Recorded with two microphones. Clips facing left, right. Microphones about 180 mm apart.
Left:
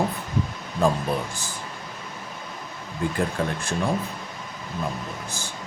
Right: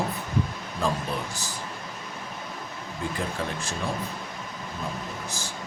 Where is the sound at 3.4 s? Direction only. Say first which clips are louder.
Left 5 dB; 55° left (ahead or behind).